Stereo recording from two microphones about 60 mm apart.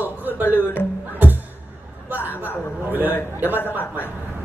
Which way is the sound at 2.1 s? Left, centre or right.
Left.